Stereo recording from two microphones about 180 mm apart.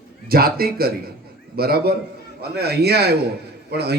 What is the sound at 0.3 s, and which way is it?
A man's voice, 55° right (ahead or behind).